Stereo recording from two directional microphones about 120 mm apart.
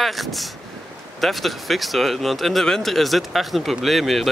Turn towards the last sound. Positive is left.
turn(degrees=0)  # may be behind; listen again after turning